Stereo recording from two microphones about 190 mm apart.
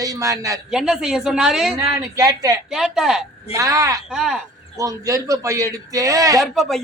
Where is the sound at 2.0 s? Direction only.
20° right (ahead or behind).